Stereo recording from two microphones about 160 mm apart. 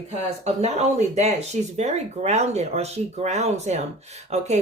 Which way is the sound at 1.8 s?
45° right (ahead or behind).